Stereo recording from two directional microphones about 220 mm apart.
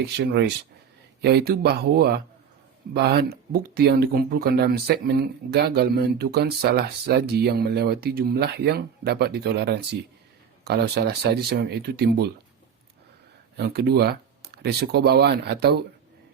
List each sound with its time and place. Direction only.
0.0 s speech: 50° right (ahead or behind)
13.6 s speech: 45° right (ahead or behind)